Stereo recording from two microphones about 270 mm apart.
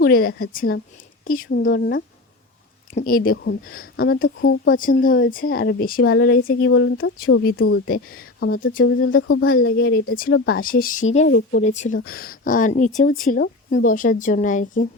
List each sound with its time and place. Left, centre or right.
0.0 s speech: left
4.7 s speech: left
7.9 s speech: left
8.4 s speech: left
11.3 s speech: left
11.6 s a woman's voice: left